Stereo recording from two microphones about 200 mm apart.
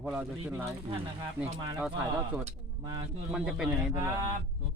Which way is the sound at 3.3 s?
5° right (ahead or behind).